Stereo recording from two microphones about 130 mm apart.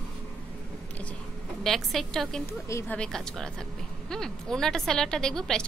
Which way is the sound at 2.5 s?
20° left (ahead or behind).